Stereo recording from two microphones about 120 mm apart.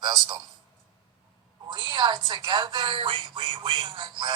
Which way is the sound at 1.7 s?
40° right (ahead or behind).